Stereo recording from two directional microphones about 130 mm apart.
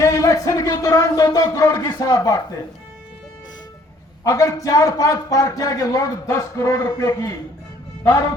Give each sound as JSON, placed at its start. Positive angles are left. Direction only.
{"t": 0.0, "sound": "speech", "side_deg": 25}
{"t": 4.2, "sound": "a man's voice", "side_deg": 25}